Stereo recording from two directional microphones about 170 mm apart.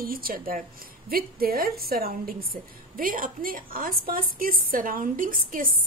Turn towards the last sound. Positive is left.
turn(degrees=-55)  # may be behind; listen again after turning